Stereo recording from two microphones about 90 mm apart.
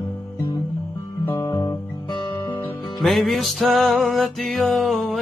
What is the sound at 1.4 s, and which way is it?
Guitar, 40° left (ahead or behind).